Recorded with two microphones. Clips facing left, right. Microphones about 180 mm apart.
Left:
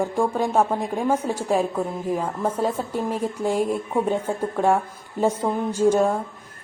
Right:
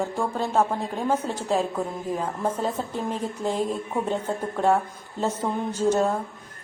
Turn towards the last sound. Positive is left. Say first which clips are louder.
# left 3 dB
turn(degrees=10)  # may be behind; listen again after turning